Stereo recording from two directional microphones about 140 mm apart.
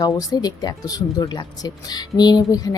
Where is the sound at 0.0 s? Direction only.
25° left (ahead or behind).